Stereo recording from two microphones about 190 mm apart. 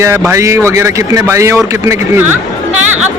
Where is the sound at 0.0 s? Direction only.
10° right (ahead or behind).